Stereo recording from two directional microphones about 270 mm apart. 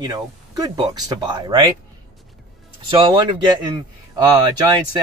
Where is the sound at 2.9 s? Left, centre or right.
Centre.